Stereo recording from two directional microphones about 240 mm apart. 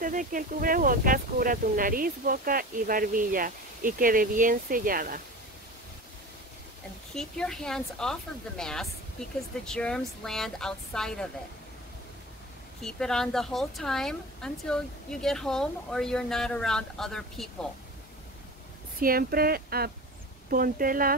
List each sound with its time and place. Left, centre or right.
0.0 s speech: right
7.2 s speech: centre
12.8 s speech: centre
18.9 s speech: right